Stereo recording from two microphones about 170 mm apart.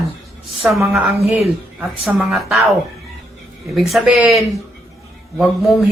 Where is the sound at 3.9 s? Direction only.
10° right (ahead or behind).